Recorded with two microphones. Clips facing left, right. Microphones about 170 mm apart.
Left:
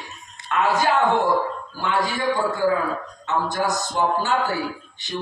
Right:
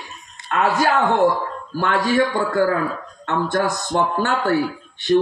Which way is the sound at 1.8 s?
60° right (ahead or behind).